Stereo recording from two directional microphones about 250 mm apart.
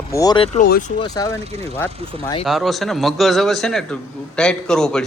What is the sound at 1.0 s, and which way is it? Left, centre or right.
Speech, centre.